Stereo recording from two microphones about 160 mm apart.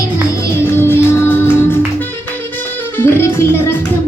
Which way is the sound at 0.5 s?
15° left (ahead or behind).